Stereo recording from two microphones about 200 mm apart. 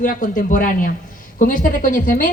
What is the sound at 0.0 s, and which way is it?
A woman's voice, 40° left (ahead or behind).